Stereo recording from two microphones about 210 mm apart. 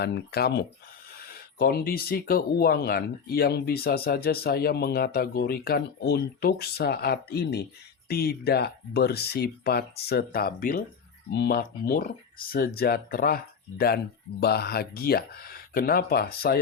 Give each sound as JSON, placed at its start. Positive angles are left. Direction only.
{"t": 0.0, "sound": "speech", "side_deg": 50}